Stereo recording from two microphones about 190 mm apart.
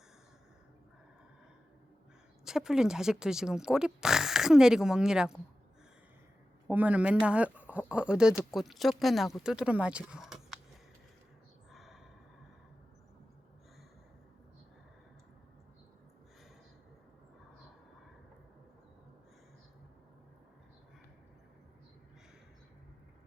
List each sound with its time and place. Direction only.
2.4 s speech: 5° right (ahead or behind)
6.7 s speech: 10° right (ahead or behind)
11.7 s gasp: centre (ahead or behind)